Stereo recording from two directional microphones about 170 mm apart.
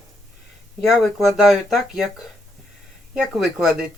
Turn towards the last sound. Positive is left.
turn(degrees=-5)  # may be behind; listen again after turning